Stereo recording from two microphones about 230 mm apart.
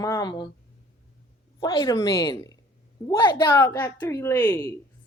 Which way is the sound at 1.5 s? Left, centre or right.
Centre.